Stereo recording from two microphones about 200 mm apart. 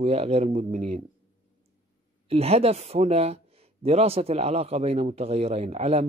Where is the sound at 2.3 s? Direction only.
30° right (ahead or behind).